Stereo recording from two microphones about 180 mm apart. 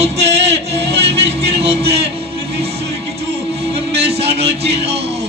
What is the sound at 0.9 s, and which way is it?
Music, 65° right (ahead or behind).